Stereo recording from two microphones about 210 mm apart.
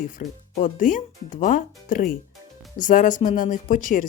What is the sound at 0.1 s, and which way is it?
Speech, 40° left (ahead or behind).